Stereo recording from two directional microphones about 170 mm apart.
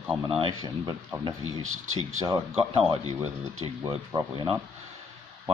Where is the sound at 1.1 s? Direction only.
20° right (ahead or behind).